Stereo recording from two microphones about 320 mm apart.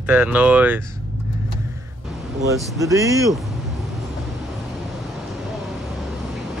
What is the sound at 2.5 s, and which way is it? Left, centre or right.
Speech, centre.